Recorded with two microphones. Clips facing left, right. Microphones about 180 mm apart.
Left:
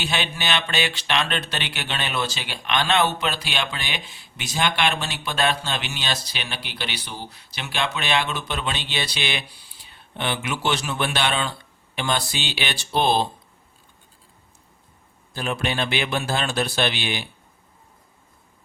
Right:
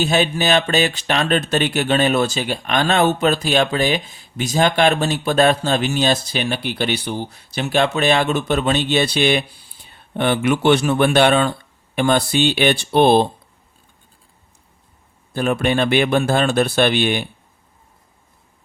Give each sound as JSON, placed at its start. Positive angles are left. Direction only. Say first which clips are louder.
{"t": 0.0, "sound": "speech", "louder": "right 10 dB", "side_deg": -40}
{"t": 15.3, "sound": "speech", "louder": "right 8 dB", "side_deg": -55}